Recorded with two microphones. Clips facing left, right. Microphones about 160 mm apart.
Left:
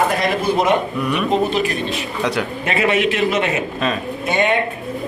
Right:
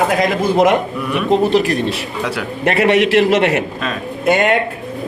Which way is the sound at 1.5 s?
75° right (ahead or behind).